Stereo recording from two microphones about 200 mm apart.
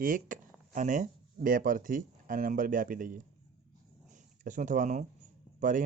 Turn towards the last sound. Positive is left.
turn(degrees=-40)  # may be behind; listen again after turning